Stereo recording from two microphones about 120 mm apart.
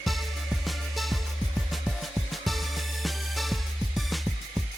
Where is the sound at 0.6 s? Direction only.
Centre (ahead or behind).